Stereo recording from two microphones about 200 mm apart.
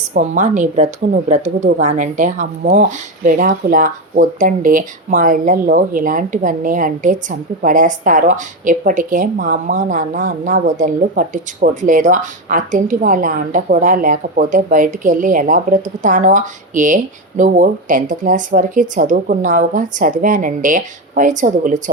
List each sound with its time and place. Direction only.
0.1 s speech: 40° right (ahead or behind)